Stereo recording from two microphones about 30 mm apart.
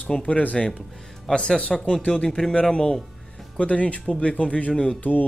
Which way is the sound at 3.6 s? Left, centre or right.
Left.